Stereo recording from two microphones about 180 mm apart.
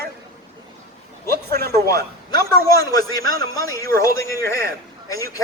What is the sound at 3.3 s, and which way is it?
Speech, 55° right (ahead or behind).